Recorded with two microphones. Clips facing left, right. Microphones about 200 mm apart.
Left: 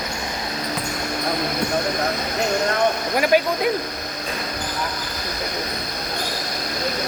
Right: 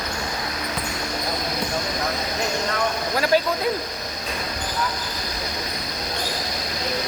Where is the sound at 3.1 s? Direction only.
15° left (ahead or behind).